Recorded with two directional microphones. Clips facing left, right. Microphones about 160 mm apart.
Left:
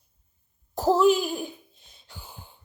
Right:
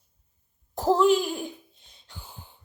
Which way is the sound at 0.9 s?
5° left (ahead or behind).